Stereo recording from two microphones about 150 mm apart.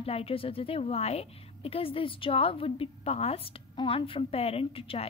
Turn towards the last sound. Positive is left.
turn(degrees=40)  # may be behind; listen again after turning